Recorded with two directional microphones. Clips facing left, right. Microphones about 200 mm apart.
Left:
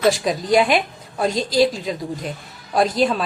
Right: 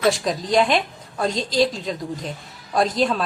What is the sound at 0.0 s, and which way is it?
A woman's voice, 5° left (ahead or behind).